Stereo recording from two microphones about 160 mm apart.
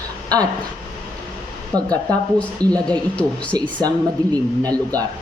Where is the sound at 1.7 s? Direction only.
25° right (ahead or behind).